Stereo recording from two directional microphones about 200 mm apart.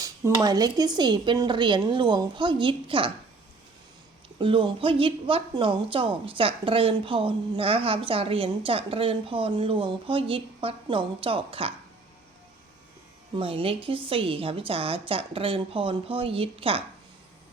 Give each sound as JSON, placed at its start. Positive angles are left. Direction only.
{"t": 0.4, "sound": "a woman's voice", "side_deg": -20}
{"t": 4.4, "sound": "a woman's voice", "side_deg": -25}
{"t": 13.3, "sound": "a woman's voice", "side_deg": -30}